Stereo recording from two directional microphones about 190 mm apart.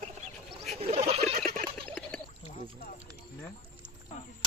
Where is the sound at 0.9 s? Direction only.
30° right (ahead or behind).